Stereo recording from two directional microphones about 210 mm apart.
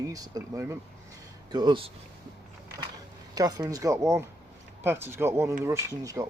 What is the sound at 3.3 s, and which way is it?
Speech, 15° right (ahead or behind).